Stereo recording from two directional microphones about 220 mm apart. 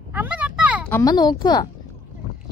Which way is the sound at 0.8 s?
15° left (ahead or behind).